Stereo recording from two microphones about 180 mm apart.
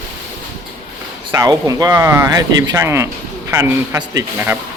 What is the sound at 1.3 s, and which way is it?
Speech, 20° right (ahead or behind).